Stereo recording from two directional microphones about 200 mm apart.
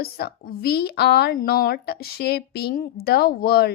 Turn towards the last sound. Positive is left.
turn(degrees=50)  # may be behind; listen again after turning